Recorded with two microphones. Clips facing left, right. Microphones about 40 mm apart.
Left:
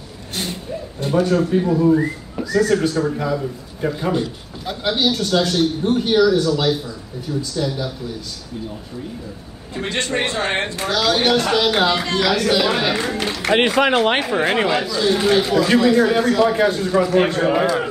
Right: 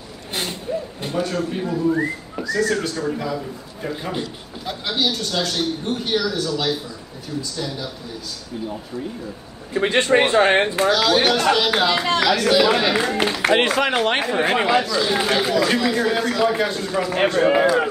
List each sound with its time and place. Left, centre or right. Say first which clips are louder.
0.3 s a sound: even; centre
1.0 s a man's voice: left 8 dB; centre
9.8 s speech: right 5 dB; right
10.9 s a man's voice: left 3 dB; centre
13.5 s speech: left 4 dB; centre
14.2 s a man's voice: left 1 dB; centre